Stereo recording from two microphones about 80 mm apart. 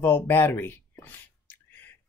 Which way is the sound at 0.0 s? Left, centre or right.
Left.